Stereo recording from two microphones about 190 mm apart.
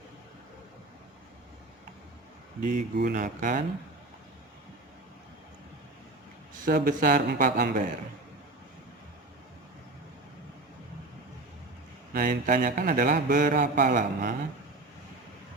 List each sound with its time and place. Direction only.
2.6 s a man's voice: 45° right (ahead or behind)
6.5 s a man's voice: 50° right (ahead or behind)
12.1 s a man's voice: 45° right (ahead or behind)